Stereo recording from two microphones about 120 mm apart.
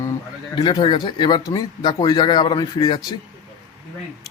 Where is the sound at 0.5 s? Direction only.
40° left (ahead or behind).